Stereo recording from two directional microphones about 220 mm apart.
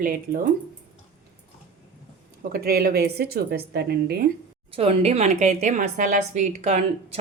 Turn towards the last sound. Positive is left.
turn(degrees=-30)  # may be behind; listen again after turning